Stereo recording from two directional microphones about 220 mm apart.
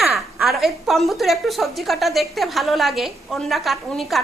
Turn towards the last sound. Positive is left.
turn(degrees=0)  # may be behind; listen again after turning